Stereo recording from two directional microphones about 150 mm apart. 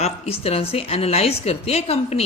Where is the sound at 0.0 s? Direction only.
40° left (ahead or behind).